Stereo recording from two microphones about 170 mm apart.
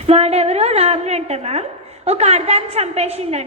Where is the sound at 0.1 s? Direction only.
40° right (ahead or behind).